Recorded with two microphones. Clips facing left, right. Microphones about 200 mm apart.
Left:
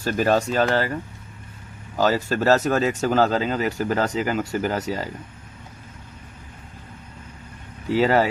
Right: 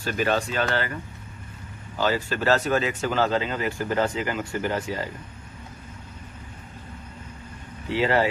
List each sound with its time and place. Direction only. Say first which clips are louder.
0.0 s speech: left 4 dB; 40° left (ahead or behind)
2.0 s speech: left 4 dB; 40° left (ahead or behind)
7.9 s speech: left 4 dB; 40° left (ahead or behind)